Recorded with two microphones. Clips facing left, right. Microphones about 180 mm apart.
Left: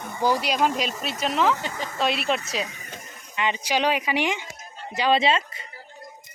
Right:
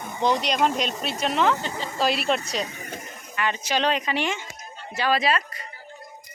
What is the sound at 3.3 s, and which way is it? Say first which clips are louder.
Speech: left 1 dB; 15° left (ahead or behind).